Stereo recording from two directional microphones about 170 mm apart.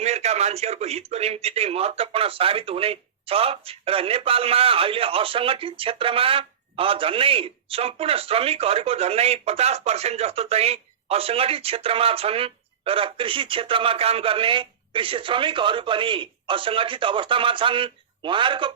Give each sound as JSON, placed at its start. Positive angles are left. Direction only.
{"t": 0.0, "sound": "a man's voice", "side_deg": -40}